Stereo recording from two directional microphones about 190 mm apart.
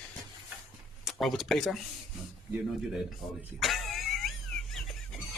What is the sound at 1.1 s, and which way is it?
Speech, centre (ahead or behind).